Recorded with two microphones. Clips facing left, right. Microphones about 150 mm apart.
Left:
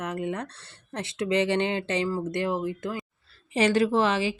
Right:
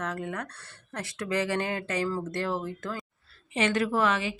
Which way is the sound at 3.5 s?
35° left (ahead or behind).